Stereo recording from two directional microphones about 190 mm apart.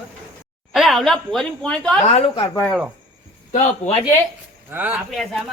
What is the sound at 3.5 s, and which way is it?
Speech, 35° left (ahead or behind).